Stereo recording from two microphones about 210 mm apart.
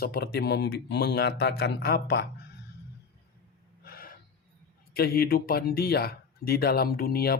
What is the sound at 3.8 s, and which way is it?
Gasp, 45° left (ahead or behind).